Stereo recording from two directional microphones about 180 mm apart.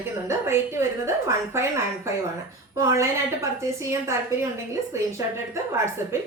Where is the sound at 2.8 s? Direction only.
15° right (ahead or behind).